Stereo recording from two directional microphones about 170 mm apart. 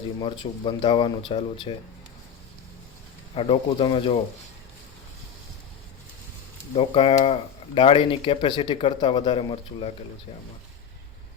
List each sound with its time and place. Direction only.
0.2 s speech: 30° left (ahead or behind)
3.3 s speech: 30° left (ahead or behind)
6.7 s speech: 35° left (ahead or behind)